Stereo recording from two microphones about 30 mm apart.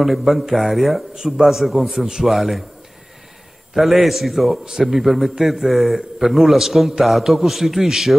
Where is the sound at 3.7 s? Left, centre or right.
Centre.